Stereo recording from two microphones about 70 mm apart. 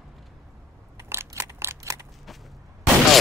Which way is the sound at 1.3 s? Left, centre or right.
Right.